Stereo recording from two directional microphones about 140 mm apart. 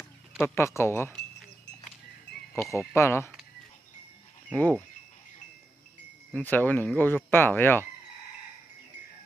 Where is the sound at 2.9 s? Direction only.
20° left (ahead or behind).